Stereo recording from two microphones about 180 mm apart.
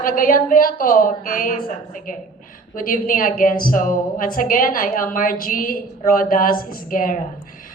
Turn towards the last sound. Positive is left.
turn(degrees=50)  # may be behind; listen again after turning